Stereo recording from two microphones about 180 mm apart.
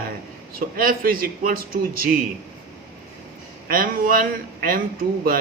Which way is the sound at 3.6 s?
50° right (ahead or behind).